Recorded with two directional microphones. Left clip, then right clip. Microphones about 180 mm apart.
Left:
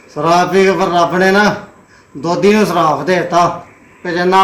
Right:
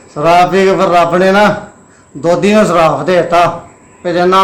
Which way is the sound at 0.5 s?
15° right (ahead or behind).